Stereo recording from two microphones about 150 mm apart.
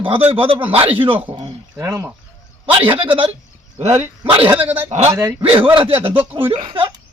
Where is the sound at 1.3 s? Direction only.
35° right (ahead or behind).